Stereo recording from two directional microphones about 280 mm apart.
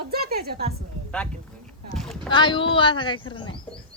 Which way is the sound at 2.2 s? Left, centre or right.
Centre.